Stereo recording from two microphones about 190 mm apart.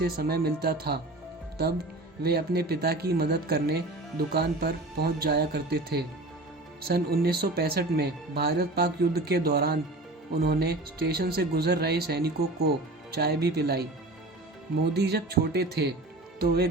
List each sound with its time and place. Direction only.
0.0 s speech: 55° right (ahead or behind)
2.2 s speech: 55° right (ahead or behind)
14.9 s speech: 55° right (ahead or behind)